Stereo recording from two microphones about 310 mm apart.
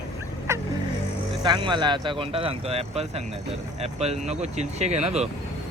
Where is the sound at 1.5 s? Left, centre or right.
Centre.